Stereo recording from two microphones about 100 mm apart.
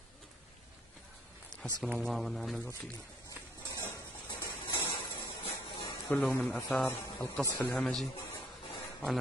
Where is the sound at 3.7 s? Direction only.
30° left (ahead or behind).